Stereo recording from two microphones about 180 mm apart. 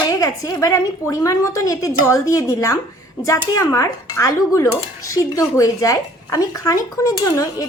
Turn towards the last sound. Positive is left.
turn(degrees=20)  # may be behind; listen again after turning